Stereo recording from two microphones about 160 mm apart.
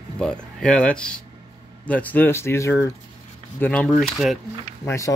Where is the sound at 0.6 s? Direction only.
5° left (ahead or behind).